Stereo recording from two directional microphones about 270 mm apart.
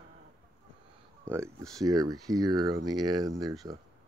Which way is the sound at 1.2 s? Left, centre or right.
Centre.